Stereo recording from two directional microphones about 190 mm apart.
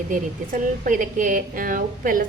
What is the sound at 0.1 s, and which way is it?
A woman's voice, 45° right (ahead or behind).